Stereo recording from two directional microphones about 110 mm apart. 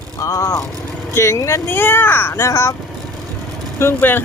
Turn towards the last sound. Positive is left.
turn(degrees=20)  # may be behind; listen again after turning